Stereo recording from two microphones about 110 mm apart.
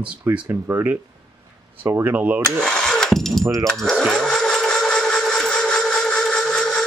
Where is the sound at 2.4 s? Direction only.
5° left (ahead or behind).